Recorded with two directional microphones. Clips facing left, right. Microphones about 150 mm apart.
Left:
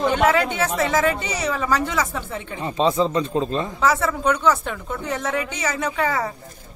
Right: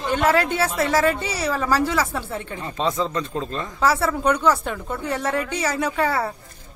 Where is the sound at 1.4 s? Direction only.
5° right (ahead or behind).